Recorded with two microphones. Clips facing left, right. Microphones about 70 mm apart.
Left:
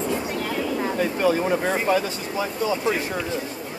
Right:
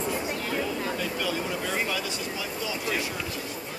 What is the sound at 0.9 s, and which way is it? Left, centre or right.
Speech, left.